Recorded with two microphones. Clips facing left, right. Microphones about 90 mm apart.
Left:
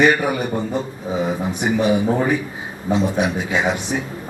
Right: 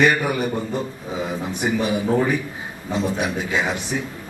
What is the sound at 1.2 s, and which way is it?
A man's voice, 15° left (ahead or behind).